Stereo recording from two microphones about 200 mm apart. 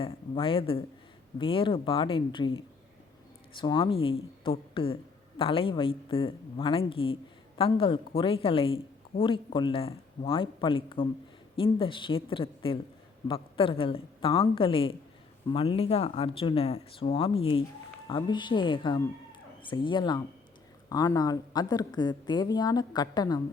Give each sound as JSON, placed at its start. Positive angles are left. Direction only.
{"t": 0.0, "sound": "a woman's voice", "side_deg": 25}
{"t": 3.6, "sound": "a woman's voice", "side_deg": 25}